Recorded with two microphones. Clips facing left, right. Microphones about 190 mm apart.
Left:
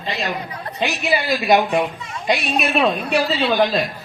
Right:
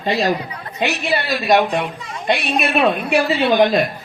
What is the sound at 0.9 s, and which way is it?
Speech, 70° right (ahead or behind).